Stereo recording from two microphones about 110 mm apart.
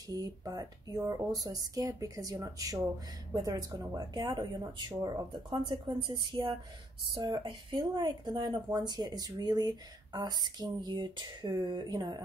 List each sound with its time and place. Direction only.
0.1 s speech: 35° right (ahead or behind)